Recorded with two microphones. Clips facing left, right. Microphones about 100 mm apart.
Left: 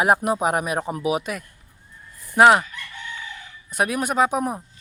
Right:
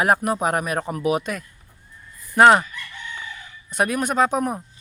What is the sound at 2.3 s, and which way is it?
Crowing, 5° left (ahead or behind).